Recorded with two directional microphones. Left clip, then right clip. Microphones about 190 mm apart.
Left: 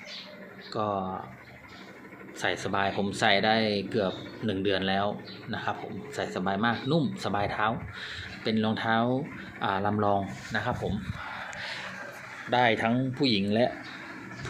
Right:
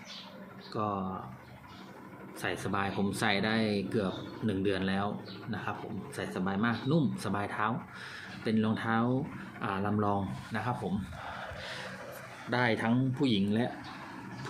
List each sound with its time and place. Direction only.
0.7 s speech: 5° right (ahead or behind)
2.4 s speech: 10° right (ahead or behind)
12.5 s speech: 15° right (ahead or behind)